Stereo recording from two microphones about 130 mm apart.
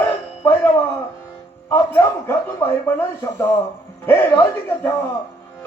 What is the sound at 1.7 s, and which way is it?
Speech, 20° left (ahead or behind).